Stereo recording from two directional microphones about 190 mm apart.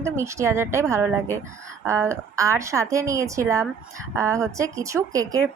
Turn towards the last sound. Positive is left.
turn(degrees=-15)  # may be behind; listen again after turning